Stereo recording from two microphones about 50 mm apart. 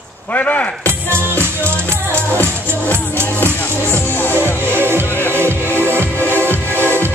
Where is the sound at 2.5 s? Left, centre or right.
Right.